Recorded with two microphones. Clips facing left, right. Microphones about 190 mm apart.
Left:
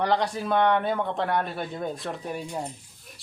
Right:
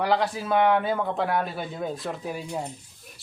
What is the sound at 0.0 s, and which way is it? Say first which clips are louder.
A woman's voice: even; 5° right (ahead or behind).